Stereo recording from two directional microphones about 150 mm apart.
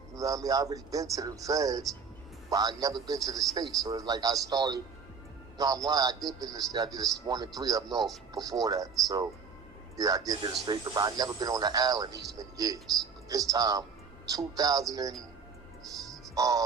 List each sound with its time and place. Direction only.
0.1 s a man's voice: 25° right (ahead or behind)
16.3 s a man's voice: 25° right (ahead or behind)